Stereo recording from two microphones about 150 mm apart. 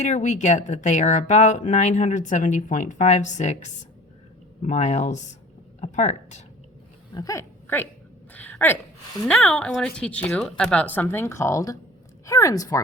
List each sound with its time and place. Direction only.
0.0 s speech: 50° left (ahead or behind)
7.1 s speech: 25° left (ahead or behind)
8.3 s a sound: 10° left (ahead or behind)
9.2 s speech: 5° left (ahead or behind); by 12.8 s 20° left (ahead or behind)